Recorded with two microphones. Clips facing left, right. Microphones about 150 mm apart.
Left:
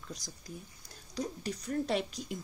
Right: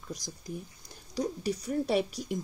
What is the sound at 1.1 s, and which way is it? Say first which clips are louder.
Speech: right 6 dB; 10° right (ahead or behind).